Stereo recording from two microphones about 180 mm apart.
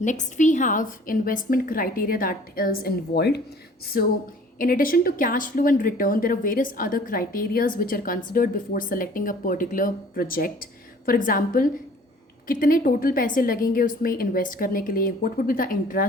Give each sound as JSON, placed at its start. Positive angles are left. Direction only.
{"t": 0.0, "sound": "a woman's voice", "side_deg": 45}